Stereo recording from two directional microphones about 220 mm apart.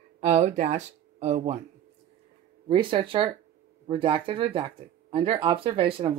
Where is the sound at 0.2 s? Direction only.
30° right (ahead or behind).